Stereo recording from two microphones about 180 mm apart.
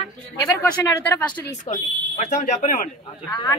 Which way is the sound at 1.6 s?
45° left (ahead or behind).